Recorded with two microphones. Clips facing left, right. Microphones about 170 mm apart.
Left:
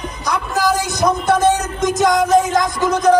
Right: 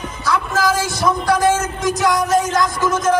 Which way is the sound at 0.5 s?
20° left (ahead or behind).